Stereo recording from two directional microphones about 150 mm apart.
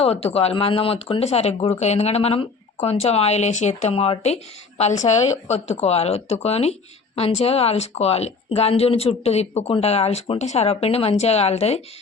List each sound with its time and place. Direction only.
0.0 s speech: 40° left (ahead or behind)